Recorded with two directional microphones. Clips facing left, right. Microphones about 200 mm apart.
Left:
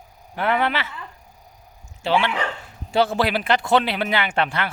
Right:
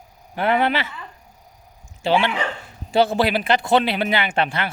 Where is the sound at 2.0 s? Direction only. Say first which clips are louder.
Right 2 dB; 25° right (ahead or behind).